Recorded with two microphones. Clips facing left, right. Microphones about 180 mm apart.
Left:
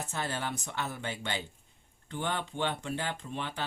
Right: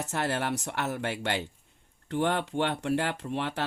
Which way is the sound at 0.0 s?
75° right (ahead or behind).